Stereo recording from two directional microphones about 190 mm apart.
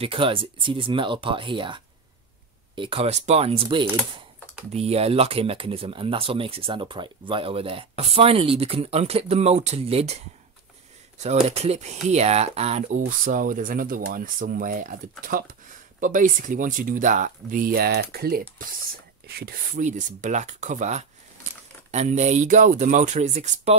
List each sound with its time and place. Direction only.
0.0 s speech: 30° right (ahead or behind)